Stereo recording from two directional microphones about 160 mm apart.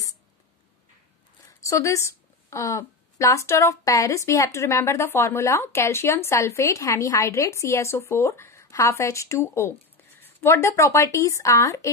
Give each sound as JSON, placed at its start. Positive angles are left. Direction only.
{"t": 1.6, "sound": "a woman's voice", "side_deg": 20}